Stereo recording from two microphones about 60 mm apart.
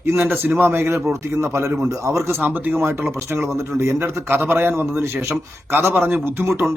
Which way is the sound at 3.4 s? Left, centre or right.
Right.